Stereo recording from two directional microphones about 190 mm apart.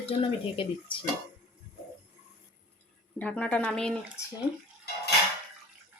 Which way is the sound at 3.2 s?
5° left (ahead or behind).